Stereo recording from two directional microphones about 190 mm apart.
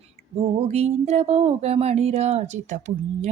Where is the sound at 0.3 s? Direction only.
35° right (ahead or behind).